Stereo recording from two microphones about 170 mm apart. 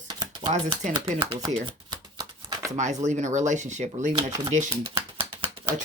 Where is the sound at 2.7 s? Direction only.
45° right (ahead or behind).